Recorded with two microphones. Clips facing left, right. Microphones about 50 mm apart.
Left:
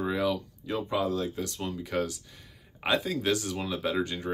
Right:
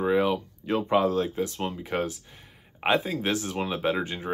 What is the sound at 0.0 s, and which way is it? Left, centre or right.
Speech, right.